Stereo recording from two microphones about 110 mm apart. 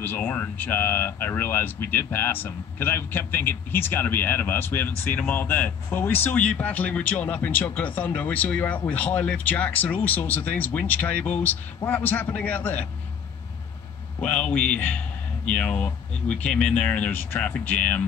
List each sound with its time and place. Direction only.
0.0 s speech: 15° left (ahead or behind)
14.2 s speech: 15° left (ahead or behind)